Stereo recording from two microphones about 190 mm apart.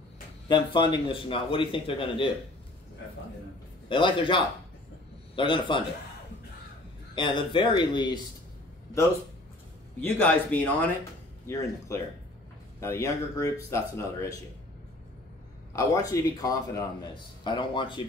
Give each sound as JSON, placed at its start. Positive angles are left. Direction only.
{"t": 0.5, "sound": "a man's voice", "side_deg": 25}
{"t": 3.9, "sound": "a man's voice", "side_deg": 25}
{"t": 7.2, "sound": "a man's voice", "side_deg": 25}
{"t": 10.0, "sound": "speech", "side_deg": 10}
{"t": 15.7, "sound": "a man's voice", "side_deg": 15}